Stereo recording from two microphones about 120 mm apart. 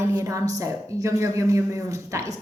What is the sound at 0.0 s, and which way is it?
Speech, 20° right (ahead or behind).